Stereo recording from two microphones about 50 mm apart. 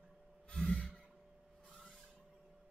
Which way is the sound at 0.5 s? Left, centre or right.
Left.